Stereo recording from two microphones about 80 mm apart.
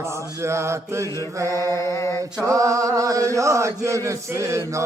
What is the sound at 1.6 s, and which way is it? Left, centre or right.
Mantra, left.